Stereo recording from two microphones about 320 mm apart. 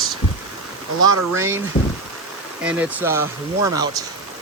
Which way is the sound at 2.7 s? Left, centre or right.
Centre.